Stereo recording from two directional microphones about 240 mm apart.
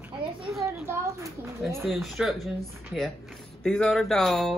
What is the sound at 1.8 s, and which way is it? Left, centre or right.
Speech, centre.